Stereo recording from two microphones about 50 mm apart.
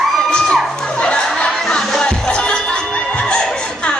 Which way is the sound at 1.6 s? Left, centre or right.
Centre.